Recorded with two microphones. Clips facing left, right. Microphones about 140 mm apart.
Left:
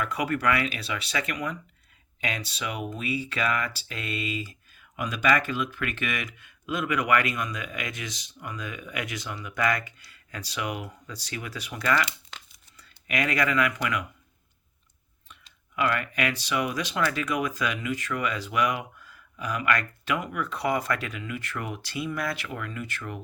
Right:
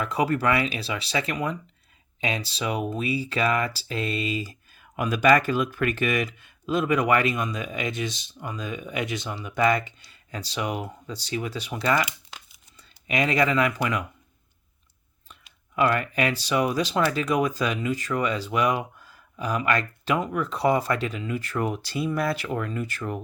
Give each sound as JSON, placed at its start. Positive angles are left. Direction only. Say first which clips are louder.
{"t": 0.0, "sound": "speech", "louder": "right 3 dB", "side_deg": -25}
{"t": 12.0, "sound": "crumpling", "louder": "even", "side_deg": -5}
{"t": 12.7, "sound": "speech", "louder": "right 3 dB", "side_deg": -25}
{"t": 15.7, "sound": "speech", "louder": "right 4 dB", "side_deg": -35}